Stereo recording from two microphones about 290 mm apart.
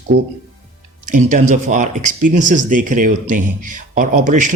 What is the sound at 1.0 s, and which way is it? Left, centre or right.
A man's voice, right.